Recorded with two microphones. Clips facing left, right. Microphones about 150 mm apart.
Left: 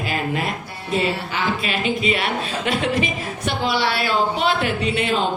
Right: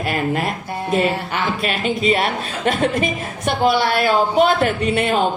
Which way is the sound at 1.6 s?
45° right (ahead or behind).